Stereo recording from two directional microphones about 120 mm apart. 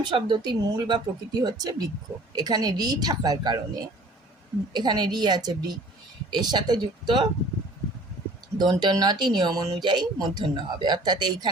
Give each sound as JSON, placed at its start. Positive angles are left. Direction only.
{"t": 0.0, "sound": "speech", "side_deg": -40}
{"t": 4.7, "sound": "speech", "side_deg": -35}
{"t": 8.5, "sound": "speech", "side_deg": -35}